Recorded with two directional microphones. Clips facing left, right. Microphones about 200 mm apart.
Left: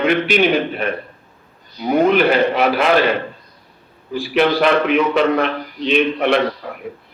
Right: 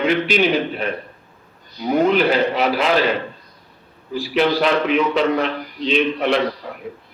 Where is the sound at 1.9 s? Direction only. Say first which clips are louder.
Left 2 dB; 60° left (ahead or behind).